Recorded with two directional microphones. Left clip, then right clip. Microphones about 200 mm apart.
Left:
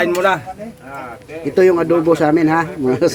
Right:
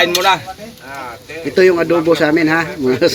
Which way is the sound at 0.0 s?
55° left (ahead or behind).